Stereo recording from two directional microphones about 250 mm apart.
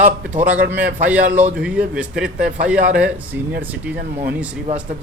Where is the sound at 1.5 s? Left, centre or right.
Centre.